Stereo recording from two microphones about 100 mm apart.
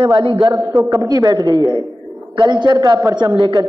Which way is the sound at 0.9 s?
35° right (ahead or behind).